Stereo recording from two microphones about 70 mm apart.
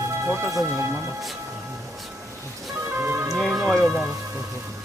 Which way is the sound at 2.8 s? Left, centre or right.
Right.